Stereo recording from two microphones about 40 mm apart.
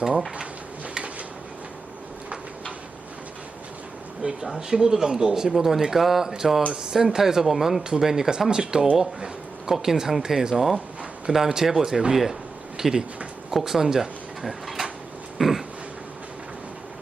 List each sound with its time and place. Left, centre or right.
4.2 s speech: centre
7.9 s speech: centre
15.4 s a sound: centre